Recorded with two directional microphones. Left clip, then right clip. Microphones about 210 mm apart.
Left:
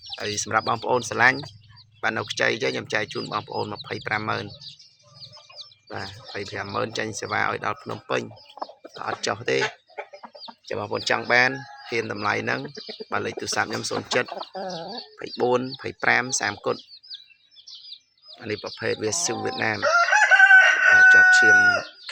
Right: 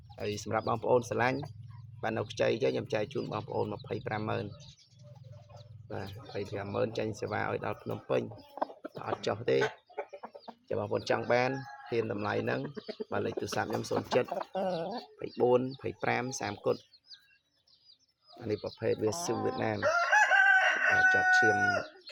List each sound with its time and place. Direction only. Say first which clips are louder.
0.2 s speech: left 9 dB; centre (ahead or behind)
5.9 s speech: left 6 dB; centre (ahead or behind)
8.6 s chicken: left 1 dB; 35° right (ahead or behind)
9.0 s speech: left 7 dB; 5° left (ahead or behind)
9.6 s chicken: left 5 dB; 55° right (ahead or behind)
10.9 s speech: left 9 dB; 5° left (ahead or behind)
12.6 s speech: left 4 dB; 45° right (ahead or behind)
13.1 s speech: left 7 dB; 5° left (ahead or behind)
14.5 s speech: left 1 dB; 25° right (ahead or behind)
15.4 s speech: left 4 dB; 5° left (ahead or behind)
18.3 s speech: left 5 dB; centre (ahead or behind)
19.8 s chicken: left 7 dB; 35° left (ahead or behind)
21.5 s speech: left 13 dB; 35° left (ahead or behind)